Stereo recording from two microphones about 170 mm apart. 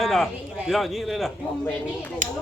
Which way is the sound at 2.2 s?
50° right (ahead or behind).